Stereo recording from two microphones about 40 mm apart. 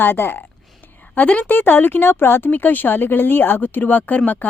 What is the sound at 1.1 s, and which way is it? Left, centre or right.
Speech, left.